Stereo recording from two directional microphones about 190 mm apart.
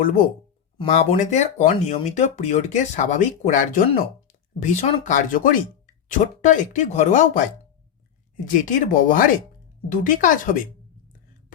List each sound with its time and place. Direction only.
0.8 s speech: 35° left (ahead or behind)
8.4 s speech: 40° left (ahead or behind)